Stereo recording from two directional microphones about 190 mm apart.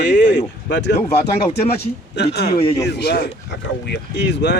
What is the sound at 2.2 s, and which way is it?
Speech, 60° left (ahead or behind).